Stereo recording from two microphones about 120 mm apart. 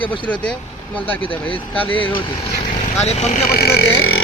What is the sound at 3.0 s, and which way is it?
Speech, 65° left (ahead or behind).